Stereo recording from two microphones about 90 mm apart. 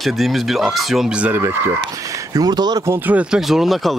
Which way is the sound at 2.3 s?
50° right (ahead or behind).